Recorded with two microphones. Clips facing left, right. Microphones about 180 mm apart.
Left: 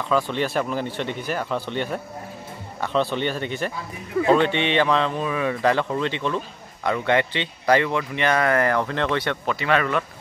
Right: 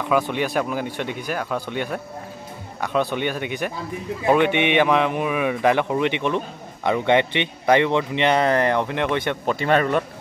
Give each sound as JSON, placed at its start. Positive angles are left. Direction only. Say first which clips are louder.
{"t": 0.1, "sound": "a man's voice", "louder": "right 1 dB", "side_deg": -10}
{"t": 9.5, "sound": "a man's voice", "louder": "right 3 dB", "side_deg": -40}